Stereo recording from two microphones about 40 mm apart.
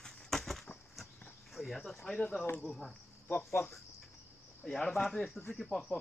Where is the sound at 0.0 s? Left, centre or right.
Centre.